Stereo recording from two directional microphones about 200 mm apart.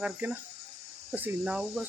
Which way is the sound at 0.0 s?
5° right (ahead or behind).